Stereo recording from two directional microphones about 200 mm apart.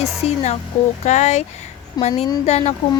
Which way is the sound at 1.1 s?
35° left (ahead or behind).